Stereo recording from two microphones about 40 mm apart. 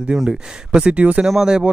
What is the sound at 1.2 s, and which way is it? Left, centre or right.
Speech, centre.